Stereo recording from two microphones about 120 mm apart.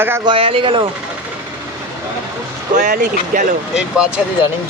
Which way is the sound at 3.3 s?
90° right.